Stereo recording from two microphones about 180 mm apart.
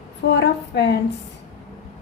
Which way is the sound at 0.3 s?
70° left (ahead or behind).